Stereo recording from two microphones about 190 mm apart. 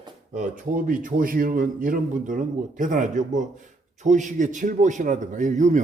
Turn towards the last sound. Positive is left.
turn(degrees=-40)  # may be behind; listen again after turning